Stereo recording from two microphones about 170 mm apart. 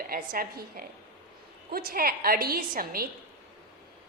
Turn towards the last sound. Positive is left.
turn(degrees=-60)  # may be behind; listen again after turning